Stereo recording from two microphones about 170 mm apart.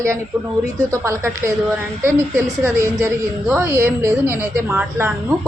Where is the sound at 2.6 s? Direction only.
15° right (ahead or behind).